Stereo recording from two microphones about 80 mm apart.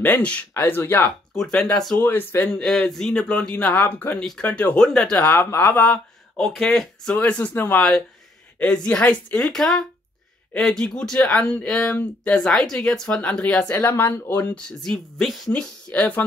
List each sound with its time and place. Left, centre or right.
0.0 s speech: centre
1.3 s speech: centre
2.0 s speech: left
2.4 s speech: centre
3.7 s speech: left
4.2 s speech: centre
5.1 s speech: left
6.3 s speech: centre
7.2 s speech: centre
8.5 s speech: centre
14.5 s speech: centre
15.5 s speech: centre